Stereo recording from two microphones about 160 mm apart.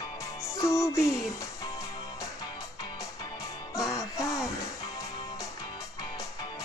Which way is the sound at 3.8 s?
20° left (ahead or behind).